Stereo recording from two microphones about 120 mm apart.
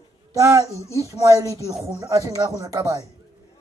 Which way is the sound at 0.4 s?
30° right (ahead or behind).